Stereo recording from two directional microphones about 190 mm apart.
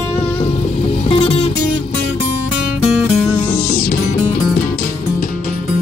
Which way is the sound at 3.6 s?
50° left (ahead or behind).